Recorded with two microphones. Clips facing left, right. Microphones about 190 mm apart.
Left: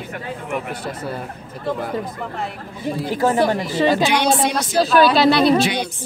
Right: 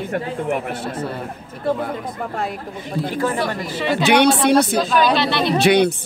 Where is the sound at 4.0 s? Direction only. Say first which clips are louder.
Right 3 dB; 65° right (ahead or behind).